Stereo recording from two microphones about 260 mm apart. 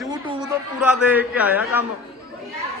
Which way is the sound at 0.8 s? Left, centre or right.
Centre.